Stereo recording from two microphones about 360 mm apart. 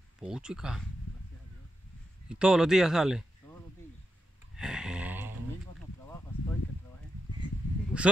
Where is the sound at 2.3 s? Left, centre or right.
Centre.